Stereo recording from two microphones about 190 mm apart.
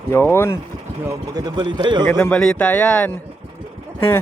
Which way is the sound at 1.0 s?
20° right (ahead or behind).